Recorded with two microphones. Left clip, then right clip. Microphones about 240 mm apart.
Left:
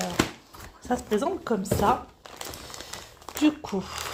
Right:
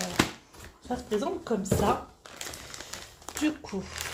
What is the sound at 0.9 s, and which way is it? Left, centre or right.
A woman's voice, left.